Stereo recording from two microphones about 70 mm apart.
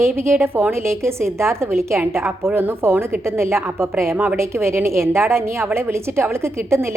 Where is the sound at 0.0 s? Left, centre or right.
Right.